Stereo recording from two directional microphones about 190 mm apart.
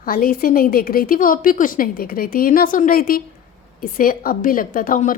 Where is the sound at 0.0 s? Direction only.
50° left (ahead or behind).